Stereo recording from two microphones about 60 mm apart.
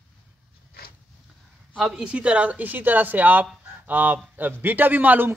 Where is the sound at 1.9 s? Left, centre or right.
Centre.